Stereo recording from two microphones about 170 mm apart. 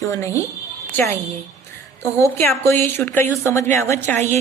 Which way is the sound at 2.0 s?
15° left (ahead or behind).